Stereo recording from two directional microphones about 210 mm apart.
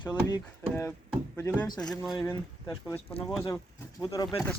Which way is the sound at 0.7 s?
10° left (ahead or behind).